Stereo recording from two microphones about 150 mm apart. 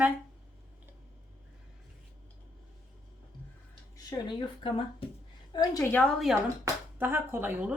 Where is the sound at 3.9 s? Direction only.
25° left (ahead or behind).